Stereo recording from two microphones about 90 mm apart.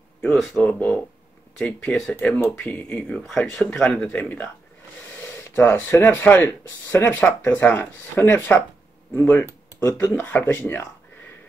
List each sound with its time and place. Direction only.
0.5 s speech: 20° left (ahead or behind)
5.0 s a sound: 30° left (ahead or behind)
6.2 s speech: 20° left (ahead or behind)